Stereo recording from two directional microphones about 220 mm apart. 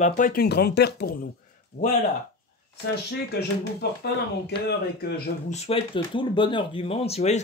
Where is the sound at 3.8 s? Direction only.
45° left (ahead or behind).